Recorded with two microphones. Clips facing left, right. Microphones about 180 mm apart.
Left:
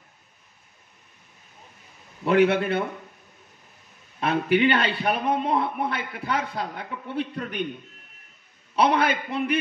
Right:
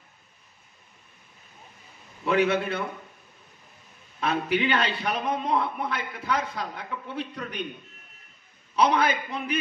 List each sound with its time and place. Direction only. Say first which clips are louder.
2.3 s a man's voice: left 4 dB; 60° left (ahead or behind)
4.2 s a man's voice: left 4 dB; 60° left (ahead or behind)
8.8 s a man's voice: left 1 dB; 60° left (ahead or behind)